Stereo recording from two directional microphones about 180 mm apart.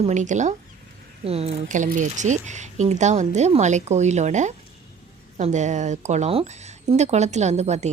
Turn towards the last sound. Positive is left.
turn(degrees=-40)  # may be behind; listen again after turning